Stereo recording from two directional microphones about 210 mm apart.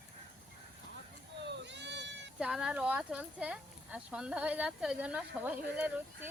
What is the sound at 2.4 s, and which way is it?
Speech, 5° right (ahead or behind).